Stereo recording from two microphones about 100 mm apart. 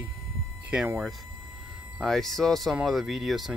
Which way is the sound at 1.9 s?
5° left (ahead or behind).